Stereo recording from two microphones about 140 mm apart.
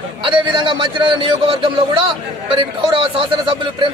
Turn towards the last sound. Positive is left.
turn(degrees=-35)  # may be behind; listen again after turning